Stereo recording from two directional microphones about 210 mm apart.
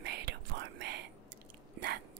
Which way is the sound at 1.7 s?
50° right (ahead or behind).